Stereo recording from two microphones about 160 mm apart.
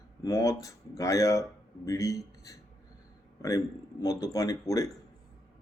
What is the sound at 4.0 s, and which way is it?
Speech, 20° left (ahead or behind).